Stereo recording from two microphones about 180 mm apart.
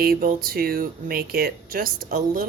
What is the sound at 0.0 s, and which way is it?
Speech, 55° right (ahead or behind).